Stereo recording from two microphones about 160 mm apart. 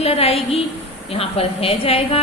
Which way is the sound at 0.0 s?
40° left (ahead or behind).